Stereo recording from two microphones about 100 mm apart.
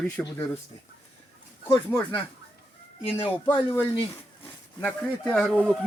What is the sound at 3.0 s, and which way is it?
Speech, 80° left.